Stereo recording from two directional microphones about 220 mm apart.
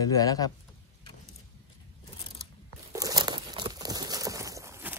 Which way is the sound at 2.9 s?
15° right (ahead or behind).